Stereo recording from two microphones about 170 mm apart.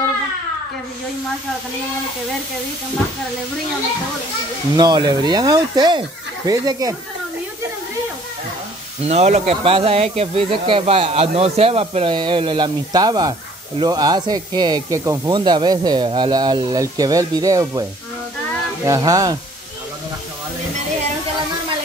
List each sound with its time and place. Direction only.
4.7 s speech: 25° right (ahead or behind)
9.0 s speech: 40° right (ahead or behind); by 17.8 s 20° right (ahead or behind)
18.9 s speech: 20° right (ahead or behind)